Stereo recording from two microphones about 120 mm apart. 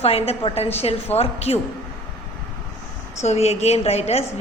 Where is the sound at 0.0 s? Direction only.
55° left (ahead or behind).